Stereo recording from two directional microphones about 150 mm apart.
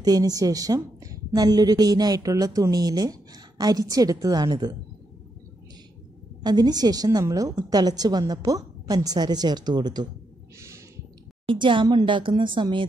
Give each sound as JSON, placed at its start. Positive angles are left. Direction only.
{"t": 0.0, "sound": "a woman's voice", "side_deg": -25}
{"t": 6.4, "sound": "a woman's voice", "side_deg": -25}
{"t": 11.4, "sound": "speech", "side_deg": -35}